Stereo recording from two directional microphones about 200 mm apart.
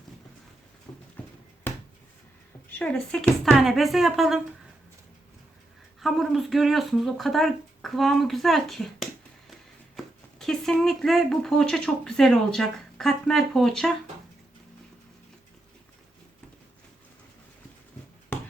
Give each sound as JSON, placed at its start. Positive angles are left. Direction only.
{"t": 0.9, "sound": "horse", "side_deg": 20}
{"t": 2.7, "sound": "speech", "side_deg": 5}
{"t": 6.0, "sound": "speech", "side_deg": 0}